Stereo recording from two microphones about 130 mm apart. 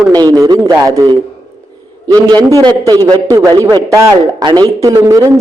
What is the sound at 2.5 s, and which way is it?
A man's voice, 30° right (ahead or behind).